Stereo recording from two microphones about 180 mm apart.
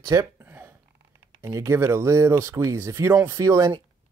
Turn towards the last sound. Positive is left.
turn(degrees=-15)  # may be behind; listen again after turning